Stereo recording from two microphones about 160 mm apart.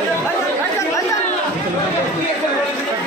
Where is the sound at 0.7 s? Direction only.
20° left (ahead or behind).